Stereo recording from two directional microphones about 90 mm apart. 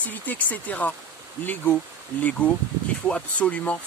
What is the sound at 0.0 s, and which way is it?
Speech, 20° left (ahead or behind).